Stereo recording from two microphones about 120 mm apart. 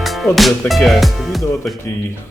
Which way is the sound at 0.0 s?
Centre (ahead or behind).